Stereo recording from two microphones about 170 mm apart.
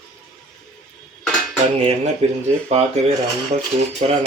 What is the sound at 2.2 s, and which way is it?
Speech, 40° right (ahead or behind).